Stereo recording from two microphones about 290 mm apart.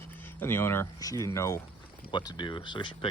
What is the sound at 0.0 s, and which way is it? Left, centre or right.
Speech, centre.